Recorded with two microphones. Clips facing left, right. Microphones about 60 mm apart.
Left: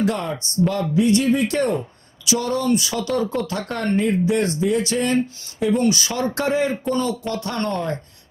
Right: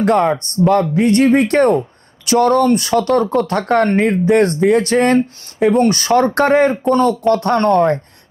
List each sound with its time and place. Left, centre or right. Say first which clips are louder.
0.0 s speech: right 9 dB; right